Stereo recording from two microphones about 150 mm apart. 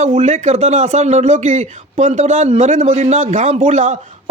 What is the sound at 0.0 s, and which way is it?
Speech, 50° right (ahead or behind).